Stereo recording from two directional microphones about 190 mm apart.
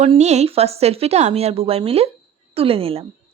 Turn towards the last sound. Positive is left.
turn(degrees=-30)  # may be behind; listen again after turning